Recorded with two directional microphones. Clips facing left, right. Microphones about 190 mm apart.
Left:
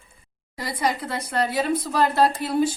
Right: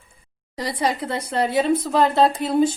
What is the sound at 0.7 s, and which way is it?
A woman's voice, 30° right (ahead or behind).